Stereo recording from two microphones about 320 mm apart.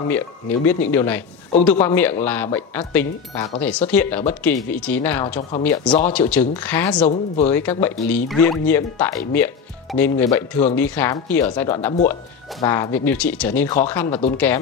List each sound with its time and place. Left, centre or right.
0.1 s speech: centre
7.0 s speech: left
7.8 s speech: centre